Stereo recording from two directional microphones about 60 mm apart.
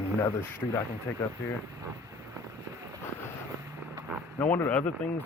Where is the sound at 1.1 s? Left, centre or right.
Left.